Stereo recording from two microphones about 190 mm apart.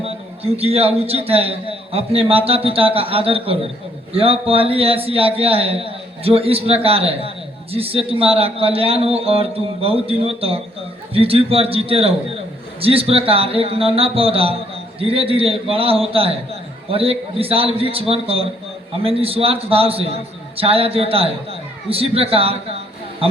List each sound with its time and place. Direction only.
0.0 s a man's voice: 30° right (ahead or behind)